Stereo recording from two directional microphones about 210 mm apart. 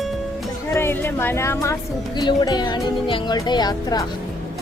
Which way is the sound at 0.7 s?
10° left (ahead or behind).